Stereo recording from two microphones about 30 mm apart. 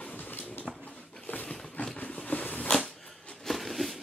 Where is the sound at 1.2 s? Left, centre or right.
Left.